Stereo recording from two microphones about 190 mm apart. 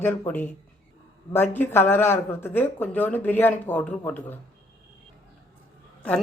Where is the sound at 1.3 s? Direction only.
10° left (ahead or behind).